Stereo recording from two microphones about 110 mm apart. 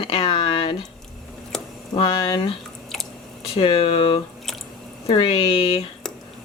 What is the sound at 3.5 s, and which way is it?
Speech, 55° left (ahead or behind).